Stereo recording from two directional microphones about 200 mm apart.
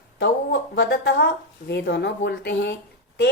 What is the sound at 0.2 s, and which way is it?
A woman's voice, 60° left (ahead or behind).